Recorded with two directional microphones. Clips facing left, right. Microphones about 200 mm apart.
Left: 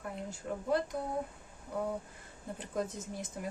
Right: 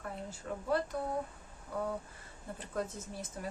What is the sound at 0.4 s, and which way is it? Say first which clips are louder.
Speech: left 2 dB; 10° left (ahead or behind).